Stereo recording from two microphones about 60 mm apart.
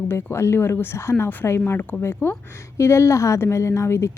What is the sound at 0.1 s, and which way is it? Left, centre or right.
Speech, left.